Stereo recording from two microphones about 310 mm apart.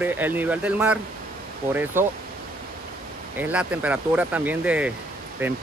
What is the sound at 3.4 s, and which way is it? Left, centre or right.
Speech, centre.